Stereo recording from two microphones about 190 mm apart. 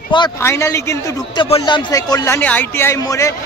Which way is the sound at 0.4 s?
15° left (ahead or behind).